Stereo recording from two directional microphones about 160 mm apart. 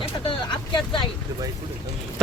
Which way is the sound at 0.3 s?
30° left (ahead or behind).